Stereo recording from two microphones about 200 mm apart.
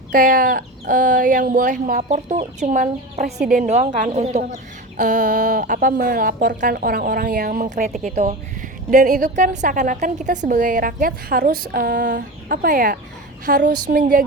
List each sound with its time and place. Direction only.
0.1 s speech: 45° right (ahead or behind)